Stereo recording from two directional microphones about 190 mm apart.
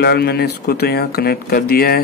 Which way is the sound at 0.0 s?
55° left (ahead or behind).